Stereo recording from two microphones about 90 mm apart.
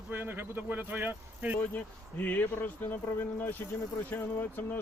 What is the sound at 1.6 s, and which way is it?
Speech, 20° left (ahead or behind).